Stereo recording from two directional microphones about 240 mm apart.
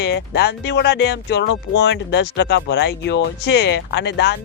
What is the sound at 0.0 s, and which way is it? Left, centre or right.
Speech, left.